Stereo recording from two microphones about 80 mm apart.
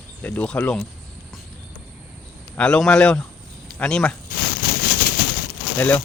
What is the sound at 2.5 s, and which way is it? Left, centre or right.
A man's voice, centre.